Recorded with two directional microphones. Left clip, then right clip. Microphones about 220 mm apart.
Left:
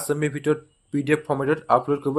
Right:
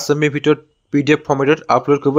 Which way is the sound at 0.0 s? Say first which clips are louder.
Right 9 dB; 30° right (ahead or behind).